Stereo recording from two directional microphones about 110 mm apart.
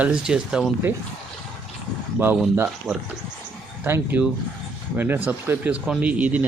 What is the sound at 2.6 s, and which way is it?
Speech, 5° right (ahead or behind).